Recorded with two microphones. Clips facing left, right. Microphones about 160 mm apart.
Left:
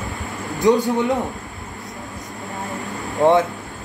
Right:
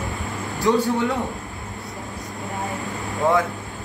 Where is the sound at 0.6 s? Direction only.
20° left (ahead or behind).